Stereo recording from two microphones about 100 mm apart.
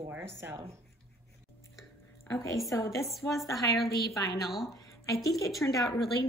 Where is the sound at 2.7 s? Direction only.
30° left (ahead or behind).